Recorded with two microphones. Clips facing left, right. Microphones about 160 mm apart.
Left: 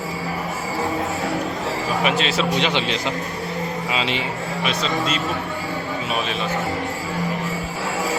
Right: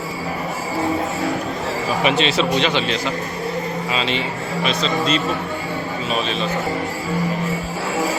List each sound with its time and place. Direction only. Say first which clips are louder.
2.0 s speech: right 4 dB; 5° left (ahead or behind)
2.6 s a man's voice: right 2 dB; 15° left (ahead or behind)